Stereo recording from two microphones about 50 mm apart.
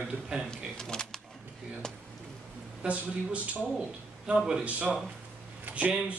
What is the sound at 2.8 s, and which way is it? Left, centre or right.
Speech, right.